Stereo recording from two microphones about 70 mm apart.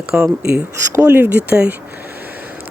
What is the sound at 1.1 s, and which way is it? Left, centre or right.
Speech, right.